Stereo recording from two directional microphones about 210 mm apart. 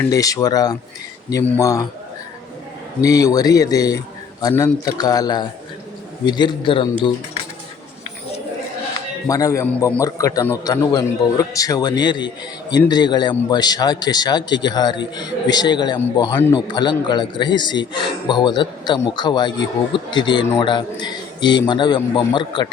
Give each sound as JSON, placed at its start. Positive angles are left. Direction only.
{"t": 0.0, "sound": "a man's voice", "side_deg": 15}
{"t": 3.0, "sound": "a man's voice", "side_deg": 15}
{"t": 9.2, "sound": "a man's voice", "side_deg": 15}